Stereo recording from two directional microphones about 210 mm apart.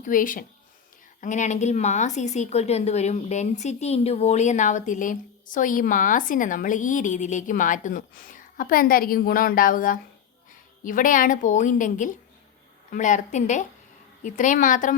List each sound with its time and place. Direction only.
0.0 s a woman's voice: 40° left (ahead or behind)